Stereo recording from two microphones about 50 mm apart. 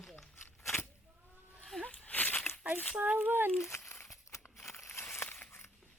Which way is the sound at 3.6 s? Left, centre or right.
Left.